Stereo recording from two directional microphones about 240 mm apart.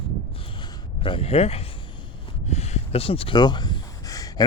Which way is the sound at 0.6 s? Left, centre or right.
Left.